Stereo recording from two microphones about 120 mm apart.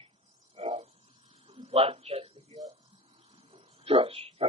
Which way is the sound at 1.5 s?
55° right (ahead or behind).